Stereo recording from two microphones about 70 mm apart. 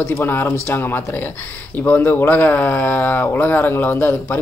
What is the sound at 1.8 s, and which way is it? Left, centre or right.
Speech, left.